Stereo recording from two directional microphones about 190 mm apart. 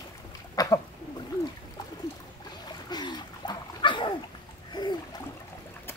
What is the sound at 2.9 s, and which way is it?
Dog, 20° left (ahead or behind).